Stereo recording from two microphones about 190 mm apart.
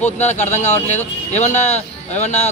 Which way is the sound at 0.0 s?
35° left (ahead or behind).